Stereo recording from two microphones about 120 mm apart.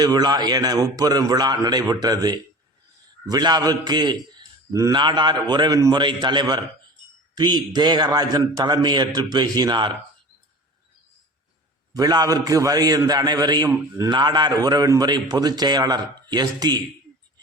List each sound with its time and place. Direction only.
0.0 s a man's voice: 35° right (ahead or behind)
4.7 s speech: 25° right (ahead or behind)
4.9 s a man's voice: 40° right (ahead or behind)
11.9 s a man's voice: 30° right (ahead or behind)
13.7 s speech: 25° right (ahead or behind)
14.1 s a man's voice: 35° right (ahead or behind)